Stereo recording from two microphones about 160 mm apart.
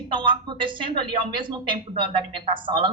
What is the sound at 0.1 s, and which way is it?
A woman's voice, 30° right (ahead or behind).